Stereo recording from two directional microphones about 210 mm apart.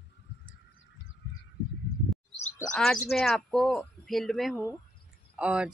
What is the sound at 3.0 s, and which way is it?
Speech, centre (ahead or behind).